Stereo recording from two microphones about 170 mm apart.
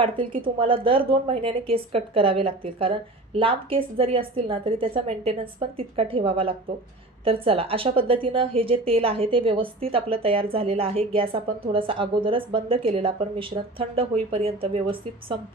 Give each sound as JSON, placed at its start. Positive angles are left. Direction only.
{"t": 0.0, "sound": "a woman's voice", "side_deg": -30}